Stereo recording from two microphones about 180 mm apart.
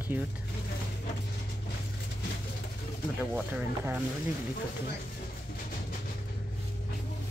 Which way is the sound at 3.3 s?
10° right (ahead or behind).